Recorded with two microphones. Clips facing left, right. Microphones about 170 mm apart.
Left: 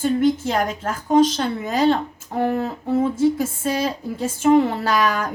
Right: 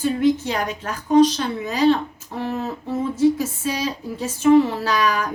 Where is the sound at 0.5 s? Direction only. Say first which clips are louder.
Left 3 dB; 50° left (ahead or behind).